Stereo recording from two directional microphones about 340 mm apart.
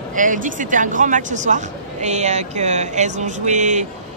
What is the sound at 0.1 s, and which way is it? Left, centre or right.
A woman's voice, right.